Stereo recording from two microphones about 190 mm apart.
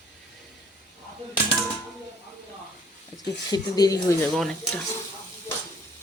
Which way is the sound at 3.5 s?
20° left (ahead or behind).